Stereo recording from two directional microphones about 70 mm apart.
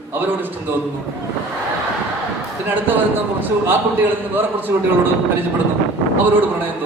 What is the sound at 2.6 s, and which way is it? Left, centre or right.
A man's voice, right.